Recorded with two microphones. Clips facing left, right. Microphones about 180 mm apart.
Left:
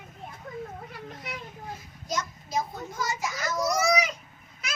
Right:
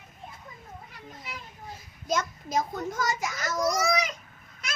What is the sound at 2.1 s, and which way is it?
Speech, 55° right (ahead or behind).